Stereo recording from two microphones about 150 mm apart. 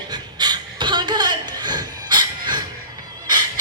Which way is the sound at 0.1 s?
30° right (ahead or behind).